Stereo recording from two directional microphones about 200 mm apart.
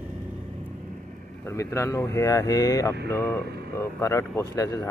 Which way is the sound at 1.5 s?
15° left (ahead or behind).